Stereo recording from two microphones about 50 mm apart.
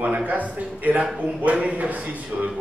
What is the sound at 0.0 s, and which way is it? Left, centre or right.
A man's voice, right.